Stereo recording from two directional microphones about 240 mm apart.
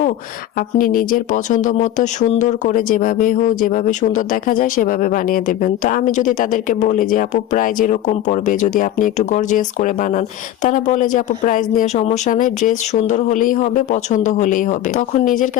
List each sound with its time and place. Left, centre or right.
0.8 s speech: left